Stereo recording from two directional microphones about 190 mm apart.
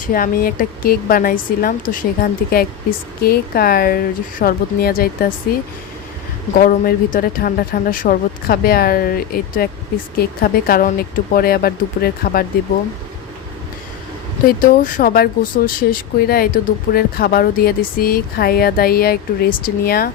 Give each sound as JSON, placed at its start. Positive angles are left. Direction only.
{"t": 0.1, "sound": "speech", "side_deg": 50}
{"t": 6.6, "sound": "speech", "side_deg": 50}
{"t": 14.4, "sound": "speech", "side_deg": 45}